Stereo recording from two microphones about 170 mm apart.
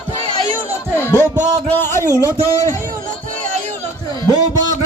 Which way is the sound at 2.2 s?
15° left (ahead or behind).